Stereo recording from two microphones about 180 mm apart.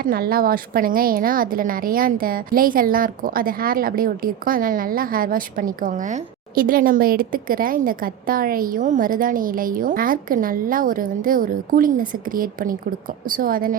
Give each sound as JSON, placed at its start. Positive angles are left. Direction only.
{"t": 0.0, "sound": "a woman's voice", "side_deg": -55}